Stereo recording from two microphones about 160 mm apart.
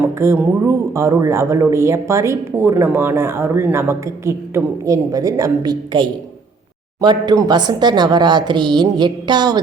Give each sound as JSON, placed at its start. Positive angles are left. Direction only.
{"t": 0.2, "sound": "a woman's voice", "side_deg": -15}